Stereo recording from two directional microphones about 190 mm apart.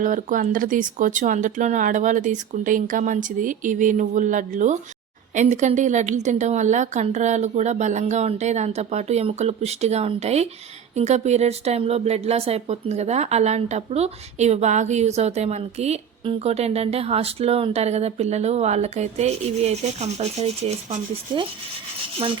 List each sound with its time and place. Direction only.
0.0 s a woman's voice: 45° right (ahead or behind)